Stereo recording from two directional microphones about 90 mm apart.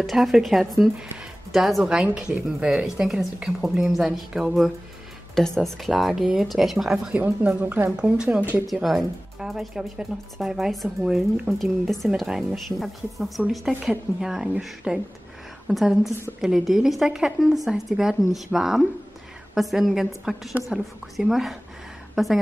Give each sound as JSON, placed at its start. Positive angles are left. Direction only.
{"t": 0.0, "sound": "speech", "side_deg": 0}
{"t": 7.1, "sound": "speech", "side_deg": -15}
{"t": 7.9, "sound": "speech", "side_deg": -10}
{"t": 8.6, "sound": "speech", "side_deg": 0}
{"t": 11.6, "sound": "a woman's voice", "side_deg": 0}